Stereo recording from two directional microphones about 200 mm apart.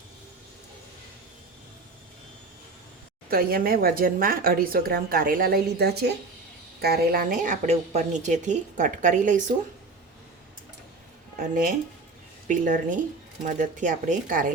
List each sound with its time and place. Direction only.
3.2 s a woman's voice: 50° right (ahead or behind)
11.3 s a woman's voice: 45° right (ahead or behind)